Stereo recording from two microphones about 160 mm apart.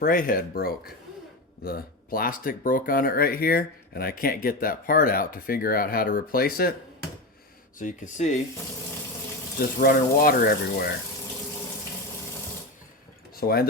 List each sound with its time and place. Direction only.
0.0 s speech: 65° left (ahead or behind)
7.8 s speech: 55° left (ahead or behind)
9.6 s speech: 65° left (ahead or behind)
13.3 s speech: 70° left (ahead or behind)